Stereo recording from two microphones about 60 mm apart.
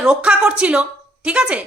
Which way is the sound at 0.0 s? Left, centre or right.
Centre.